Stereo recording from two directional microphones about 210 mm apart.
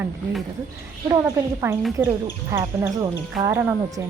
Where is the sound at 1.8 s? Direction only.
10° right (ahead or behind).